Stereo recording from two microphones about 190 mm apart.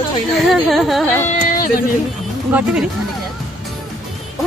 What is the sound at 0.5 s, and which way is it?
Speech, centre (ahead or behind).